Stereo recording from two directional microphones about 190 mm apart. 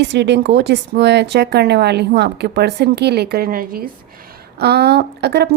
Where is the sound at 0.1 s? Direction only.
65° right (ahead or behind).